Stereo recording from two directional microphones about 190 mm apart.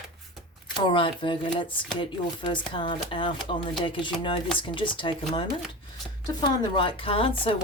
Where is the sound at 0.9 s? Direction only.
25° left (ahead or behind).